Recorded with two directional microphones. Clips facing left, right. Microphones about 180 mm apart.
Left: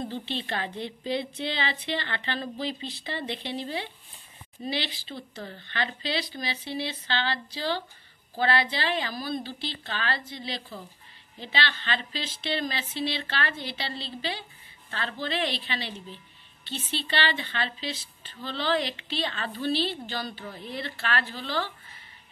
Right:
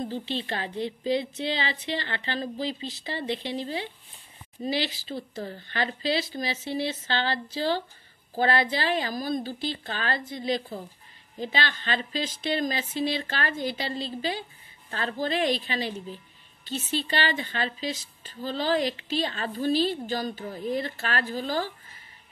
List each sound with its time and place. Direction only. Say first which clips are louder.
0.1 s a woman's voice: right 1 dB; 40° right (ahead or behind)